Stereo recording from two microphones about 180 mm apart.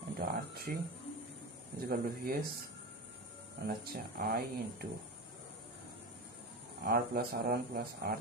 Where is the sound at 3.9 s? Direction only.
55° right (ahead or behind).